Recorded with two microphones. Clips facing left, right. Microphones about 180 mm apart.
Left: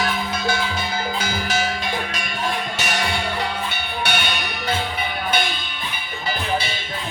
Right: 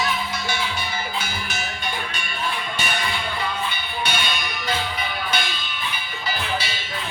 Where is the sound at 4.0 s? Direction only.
65° left (ahead or behind).